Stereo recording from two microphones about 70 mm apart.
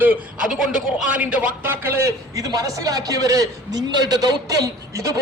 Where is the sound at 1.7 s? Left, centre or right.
Right.